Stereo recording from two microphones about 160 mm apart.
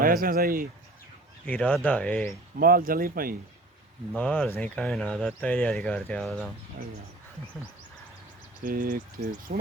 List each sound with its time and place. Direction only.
0.0 s speech: 65° right (ahead or behind)
1.5 s speech: 10° left (ahead or behind)
2.6 s speech: 65° right (ahead or behind)
4.2 s speech: 10° left (ahead or behind)
8.6 s speech: 60° right (ahead or behind)